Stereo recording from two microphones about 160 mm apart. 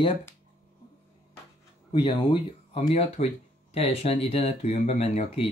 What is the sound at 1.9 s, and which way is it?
Speech, 30° left (ahead or behind).